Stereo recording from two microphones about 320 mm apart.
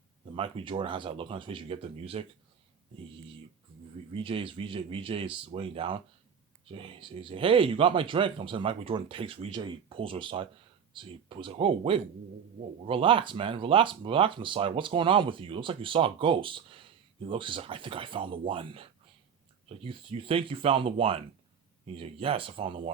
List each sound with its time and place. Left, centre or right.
0.3 s speech: centre
4.1 s speech: centre